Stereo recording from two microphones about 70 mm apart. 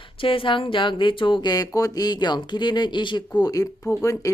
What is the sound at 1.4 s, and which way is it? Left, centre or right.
Speech, left.